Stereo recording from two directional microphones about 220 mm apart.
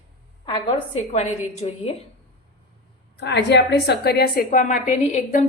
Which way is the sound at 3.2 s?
50° left (ahead or behind).